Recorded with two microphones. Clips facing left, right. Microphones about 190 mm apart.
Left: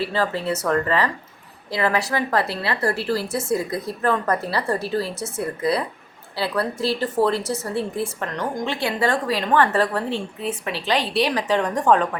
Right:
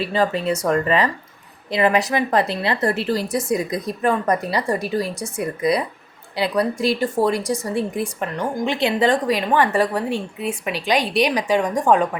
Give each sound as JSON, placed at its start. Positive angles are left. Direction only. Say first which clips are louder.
{"t": 0.0, "sound": "speech", "louder": "right 3 dB", "side_deg": -15}